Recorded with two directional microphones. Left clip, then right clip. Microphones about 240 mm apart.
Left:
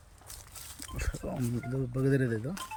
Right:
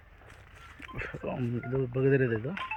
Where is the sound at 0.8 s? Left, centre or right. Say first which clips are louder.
Right 4 dB; centre.